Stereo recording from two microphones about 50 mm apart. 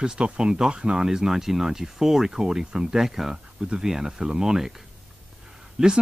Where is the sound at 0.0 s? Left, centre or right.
Centre.